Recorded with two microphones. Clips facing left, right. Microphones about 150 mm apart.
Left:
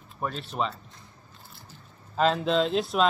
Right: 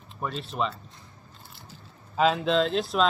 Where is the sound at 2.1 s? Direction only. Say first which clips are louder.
Right 1 dB; centre (ahead or behind).